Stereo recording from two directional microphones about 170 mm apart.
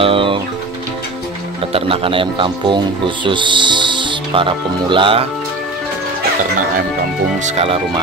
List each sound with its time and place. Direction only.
0.0 s music: 30° right (ahead or behind)
1.7 s speech: 35° right (ahead or behind)
7.4 s speech: 35° right (ahead or behind)